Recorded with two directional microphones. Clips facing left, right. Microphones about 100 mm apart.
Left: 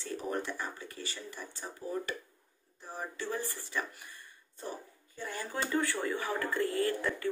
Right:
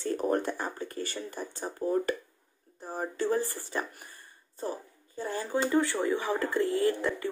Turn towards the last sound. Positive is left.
turn(degrees=-20)  # may be behind; listen again after turning